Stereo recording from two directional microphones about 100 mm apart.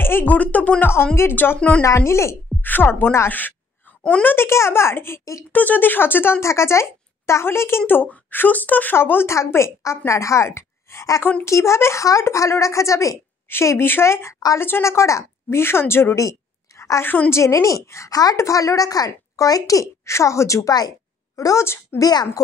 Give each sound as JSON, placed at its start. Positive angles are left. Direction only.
{"t": 0.0, "sound": "speech", "side_deg": 20}
{"t": 1.8, "sound": "speech", "side_deg": 30}
{"t": 5.5, "sound": "a woman's voice", "side_deg": 15}